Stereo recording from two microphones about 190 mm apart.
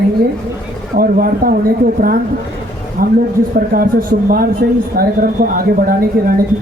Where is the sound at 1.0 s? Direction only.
50° right (ahead or behind).